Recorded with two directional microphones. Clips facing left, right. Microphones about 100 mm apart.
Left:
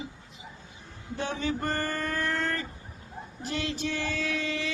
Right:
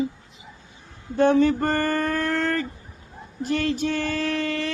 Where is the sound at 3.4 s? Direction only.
50° right (ahead or behind).